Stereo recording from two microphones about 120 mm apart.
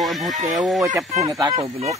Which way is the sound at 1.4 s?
35° right (ahead or behind).